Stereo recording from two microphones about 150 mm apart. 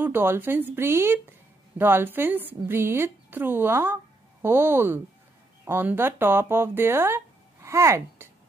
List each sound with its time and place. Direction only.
0.0 s a woman's voice: 15° right (ahead or behind)